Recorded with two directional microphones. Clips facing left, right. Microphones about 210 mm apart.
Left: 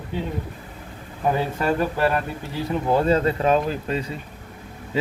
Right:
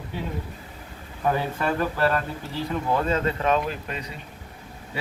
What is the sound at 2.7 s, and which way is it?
Speech, 30° left (ahead or behind).